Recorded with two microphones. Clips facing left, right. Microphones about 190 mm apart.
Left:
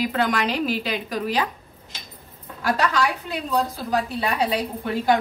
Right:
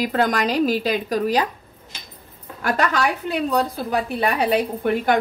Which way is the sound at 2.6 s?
55° right (ahead or behind).